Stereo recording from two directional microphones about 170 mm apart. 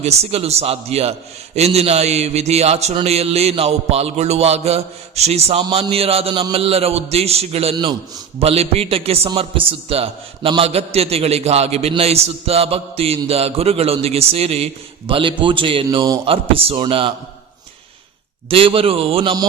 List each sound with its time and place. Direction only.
0.0 s a man's voice: 40° right (ahead or behind)
18.4 s a man's voice: 35° right (ahead or behind)